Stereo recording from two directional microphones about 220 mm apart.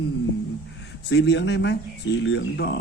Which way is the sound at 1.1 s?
50° left (ahead or behind).